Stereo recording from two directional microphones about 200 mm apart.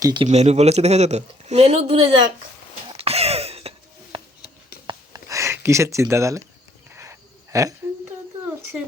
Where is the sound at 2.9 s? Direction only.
30° right (ahead or behind).